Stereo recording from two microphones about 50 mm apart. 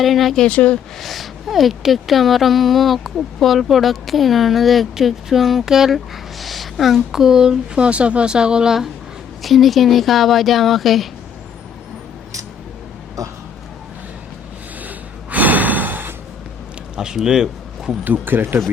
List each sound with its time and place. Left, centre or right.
0.0 s speech: centre
0.4 s speech: left
0.9 s speech: centre
7.9 s speech: right
9.4 s speech: centre
13.2 s speech: right
14.8 s gasp: right
16.9 s speech: centre
18.0 s speech: right